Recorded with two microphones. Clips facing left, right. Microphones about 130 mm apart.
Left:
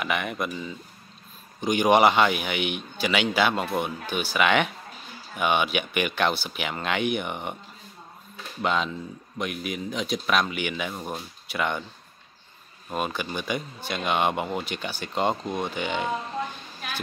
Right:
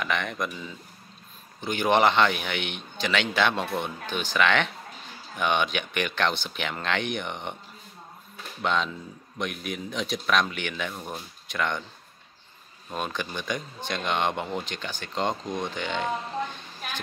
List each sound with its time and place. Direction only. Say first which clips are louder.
0.0 s speech: left 1 dB; 10° left (ahead or behind)
8.6 s speech: left 1 dB; 5° left (ahead or behind)
12.9 s speech: left 3 dB; 5° left (ahead or behind)